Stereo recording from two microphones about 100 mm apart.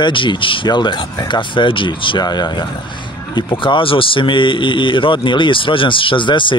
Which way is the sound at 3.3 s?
55° left (ahead or behind).